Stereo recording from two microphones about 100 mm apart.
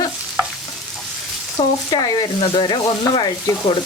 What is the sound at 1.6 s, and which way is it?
Speech, 50° left (ahead or behind).